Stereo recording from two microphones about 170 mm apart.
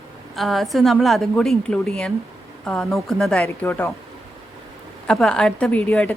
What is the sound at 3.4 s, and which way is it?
Speech, 15° left (ahead or behind).